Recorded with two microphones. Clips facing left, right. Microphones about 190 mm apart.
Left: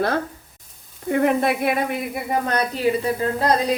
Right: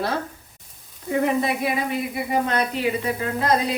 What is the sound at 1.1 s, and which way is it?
Speech, 60° left (ahead or behind).